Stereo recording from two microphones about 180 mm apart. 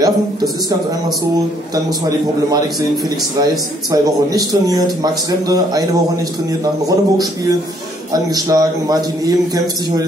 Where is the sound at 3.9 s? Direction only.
20° right (ahead or behind).